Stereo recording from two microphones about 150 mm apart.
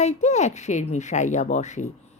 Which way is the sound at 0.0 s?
50° left (ahead or behind).